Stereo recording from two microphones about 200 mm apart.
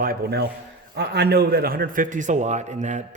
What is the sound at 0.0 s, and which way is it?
A man's voice, 50° right (ahead or behind).